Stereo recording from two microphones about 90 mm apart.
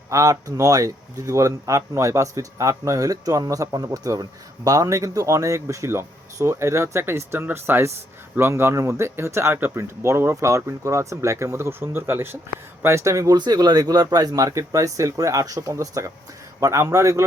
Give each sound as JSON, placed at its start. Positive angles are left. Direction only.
{"t": 0.1, "sound": "speech", "side_deg": -35}
{"t": 13.3, "sound": "speech", "side_deg": -50}